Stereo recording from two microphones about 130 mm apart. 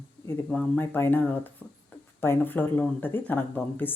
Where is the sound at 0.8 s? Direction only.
15° left (ahead or behind).